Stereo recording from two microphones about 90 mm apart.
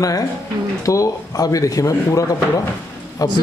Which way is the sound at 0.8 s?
40° left (ahead or behind).